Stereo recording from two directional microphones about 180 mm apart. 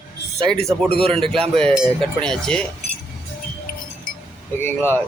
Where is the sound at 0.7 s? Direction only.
25° right (ahead or behind).